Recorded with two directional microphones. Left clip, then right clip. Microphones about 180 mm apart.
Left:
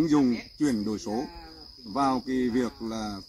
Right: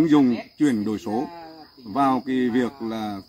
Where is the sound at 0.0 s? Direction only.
5° right (ahead or behind).